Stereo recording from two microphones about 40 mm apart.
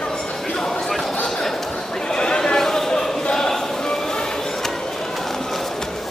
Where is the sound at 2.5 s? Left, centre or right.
Centre.